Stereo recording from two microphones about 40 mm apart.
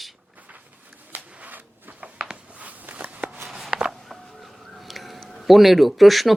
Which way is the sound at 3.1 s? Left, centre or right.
Right.